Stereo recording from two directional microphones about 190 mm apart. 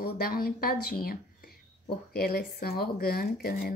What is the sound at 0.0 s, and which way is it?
Speech, 50° left (ahead or behind).